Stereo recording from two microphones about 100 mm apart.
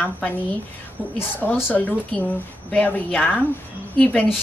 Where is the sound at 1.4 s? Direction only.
20° left (ahead or behind).